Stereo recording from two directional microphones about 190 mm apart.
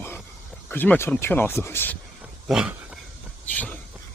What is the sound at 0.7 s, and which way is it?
Speech, 10° left (ahead or behind).